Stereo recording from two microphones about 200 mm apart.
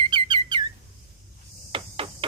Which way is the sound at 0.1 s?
25° right (ahead or behind).